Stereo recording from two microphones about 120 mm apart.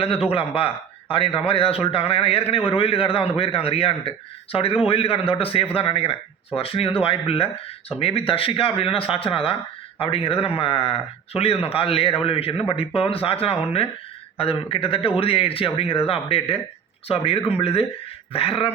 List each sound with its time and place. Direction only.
0.3 s speech: 50° left (ahead or behind)